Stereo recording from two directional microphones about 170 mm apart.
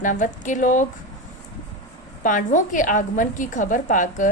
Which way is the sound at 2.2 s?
50° left (ahead or behind).